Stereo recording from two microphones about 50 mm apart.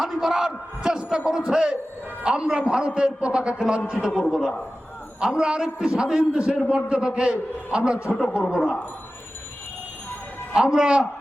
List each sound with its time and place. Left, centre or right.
0.0 s a man's voice: centre
10.5 s speech: centre